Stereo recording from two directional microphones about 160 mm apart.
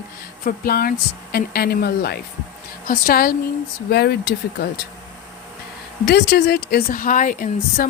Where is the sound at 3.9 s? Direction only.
90° left.